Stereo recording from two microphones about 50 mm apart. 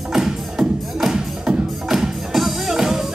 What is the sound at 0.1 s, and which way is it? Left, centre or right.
Music, centre.